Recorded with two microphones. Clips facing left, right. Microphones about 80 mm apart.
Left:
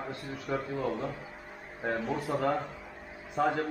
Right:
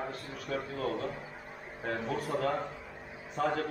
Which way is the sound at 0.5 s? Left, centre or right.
Centre.